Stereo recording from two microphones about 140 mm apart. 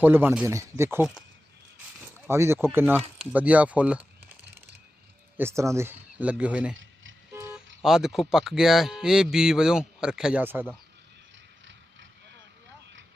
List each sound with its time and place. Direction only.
0.0 s speech: 15° right (ahead or behind)
2.1 s speech: 20° right (ahead or behind)
5.4 s speech: 20° right (ahead or behind)
7.9 s speech: 5° right (ahead or behind)